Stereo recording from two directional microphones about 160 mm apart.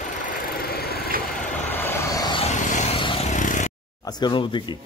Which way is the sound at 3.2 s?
50° left (ahead or behind).